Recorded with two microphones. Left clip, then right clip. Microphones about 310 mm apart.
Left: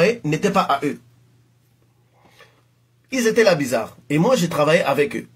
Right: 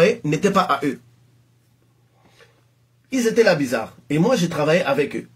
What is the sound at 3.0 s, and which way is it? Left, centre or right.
Speech, left.